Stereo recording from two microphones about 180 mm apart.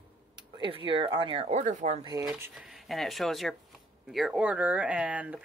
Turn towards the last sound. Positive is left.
turn(degrees=-10)  # may be behind; listen again after turning